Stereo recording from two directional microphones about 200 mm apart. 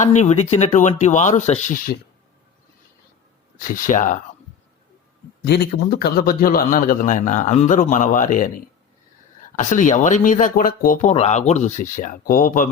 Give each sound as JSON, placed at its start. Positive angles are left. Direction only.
{"t": 0.0, "sound": "speech", "side_deg": 35}
{"t": 3.7, "sound": "speech", "side_deg": 40}
{"t": 5.5, "sound": "speech", "side_deg": 50}
{"t": 9.6, "sound": "speech", "side_deg": 40}